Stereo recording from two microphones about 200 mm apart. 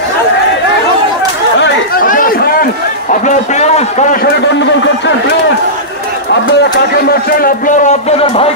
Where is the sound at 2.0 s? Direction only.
45° left (ahead or behind).